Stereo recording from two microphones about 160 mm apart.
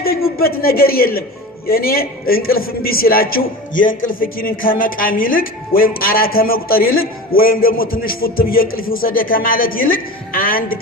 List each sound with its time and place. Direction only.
0.3 s a man's voice: 70° left (ahead or behind)